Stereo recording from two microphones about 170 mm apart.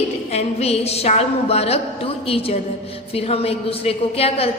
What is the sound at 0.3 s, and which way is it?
A woman's voice, 40° left (ahead or behind).